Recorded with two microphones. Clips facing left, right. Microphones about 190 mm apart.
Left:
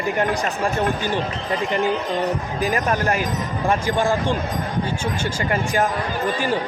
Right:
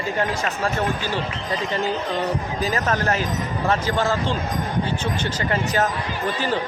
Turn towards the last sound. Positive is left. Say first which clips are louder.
# left 1 dB
turn(degrees=10)  # may be behind; listen again after turning